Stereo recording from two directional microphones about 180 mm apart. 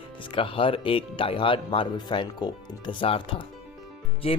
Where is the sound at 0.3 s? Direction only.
30° left (ahead or behind).